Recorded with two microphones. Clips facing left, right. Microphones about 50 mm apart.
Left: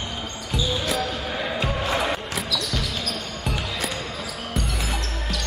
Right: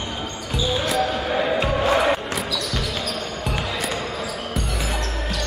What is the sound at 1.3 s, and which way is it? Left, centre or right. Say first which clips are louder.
Music: right 6 dB; right.